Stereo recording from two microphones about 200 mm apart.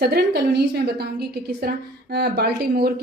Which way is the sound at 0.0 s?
55° right (ahead or behind).